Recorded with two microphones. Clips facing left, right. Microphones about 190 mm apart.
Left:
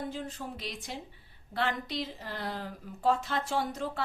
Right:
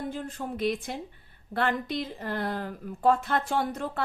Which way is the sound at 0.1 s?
55° right (ahead or behind).